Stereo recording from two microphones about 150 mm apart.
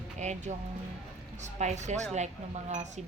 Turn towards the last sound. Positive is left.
turn(degrees=-50)  # may be behind; listen again after turning